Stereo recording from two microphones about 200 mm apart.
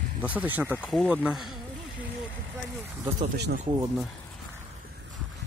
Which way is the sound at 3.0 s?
20° right (ahead or behind).